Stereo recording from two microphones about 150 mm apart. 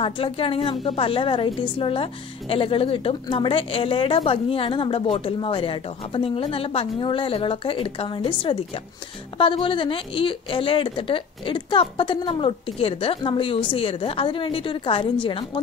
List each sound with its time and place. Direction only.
0.0 s a woman's voice: 35° left (ahead or behind)